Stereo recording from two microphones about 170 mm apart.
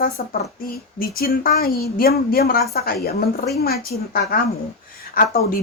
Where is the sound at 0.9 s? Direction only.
60° left (ahead or behind).